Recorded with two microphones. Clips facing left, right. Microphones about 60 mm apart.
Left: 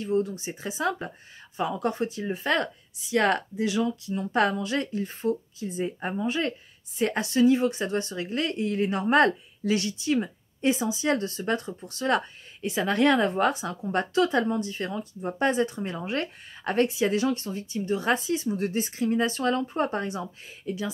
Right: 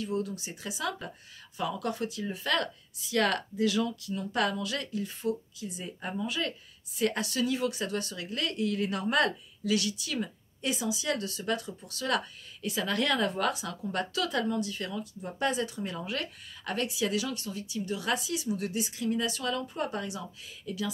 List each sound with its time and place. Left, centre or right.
0.0 s speech: left